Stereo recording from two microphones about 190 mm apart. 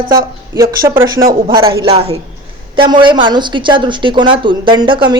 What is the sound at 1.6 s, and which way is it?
A woman's voice, 30° right (ahead or behind).